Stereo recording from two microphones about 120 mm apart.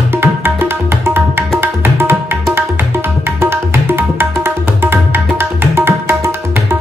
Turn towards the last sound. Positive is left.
turn(degrees=-20)  # may be behind; listen again after turning